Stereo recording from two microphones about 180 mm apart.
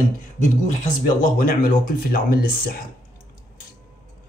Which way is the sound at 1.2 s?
50° left (ahead or behind).